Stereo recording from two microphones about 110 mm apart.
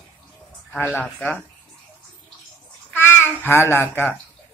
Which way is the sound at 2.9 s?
20° left (ahead or behind).